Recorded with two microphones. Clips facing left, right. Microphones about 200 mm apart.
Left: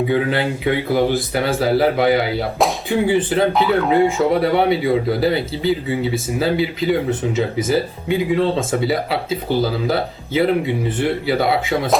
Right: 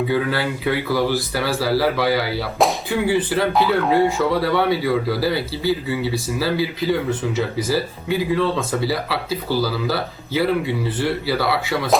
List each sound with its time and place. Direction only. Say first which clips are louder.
0.1 s speech: left 3 dB; 20° left (ahead or behind)
3.5 s speech: left 1 dB; centre (ahead or behind)
4.2 s speech: left 3 dB; 25° left (ahead or behind)